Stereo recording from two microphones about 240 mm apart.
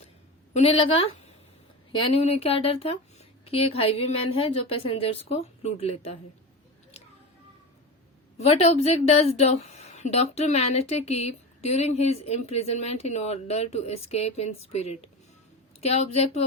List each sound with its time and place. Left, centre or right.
0.5 s speech: left
8.4 s speech: left